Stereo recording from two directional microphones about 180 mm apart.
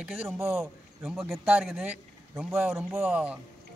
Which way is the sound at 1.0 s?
Centre (ahead or behind).